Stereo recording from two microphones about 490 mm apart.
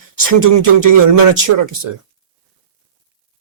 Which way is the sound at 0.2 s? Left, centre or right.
Right.